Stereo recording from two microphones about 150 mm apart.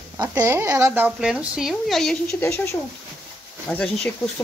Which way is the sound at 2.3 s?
20° left (ahead or behind).